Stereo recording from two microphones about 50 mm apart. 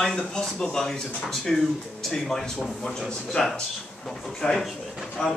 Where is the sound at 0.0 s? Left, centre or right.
Centre.